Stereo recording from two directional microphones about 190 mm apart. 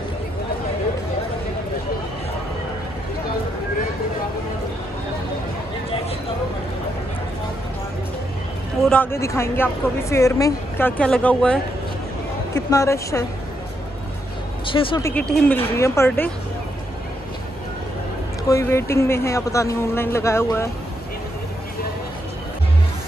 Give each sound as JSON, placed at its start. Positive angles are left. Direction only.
{"t": 8.8, "sound": "speech", "side_deg": 10}
{"t": 12.5, "sound": "speech", "side_deg": 15}
{"t": 14.7, "sound": "speech", "side_deg": 25}
{"t": 15.0, "sound": "speech", "side_deg": 15}
{"t": 18.5, "sound": "speech", "side_deg": 15}